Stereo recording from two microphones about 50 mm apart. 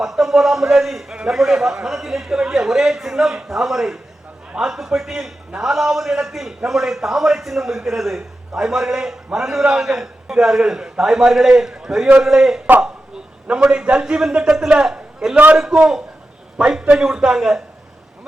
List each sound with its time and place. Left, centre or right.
0.0 s a man's voice: centre
13.5 s a man's voice: centre